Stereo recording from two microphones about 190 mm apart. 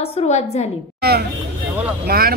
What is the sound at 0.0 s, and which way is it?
Speech, 35° left (ahead or behind).